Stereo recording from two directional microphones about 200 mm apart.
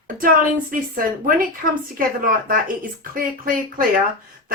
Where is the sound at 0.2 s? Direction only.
45° right (ahead or behind).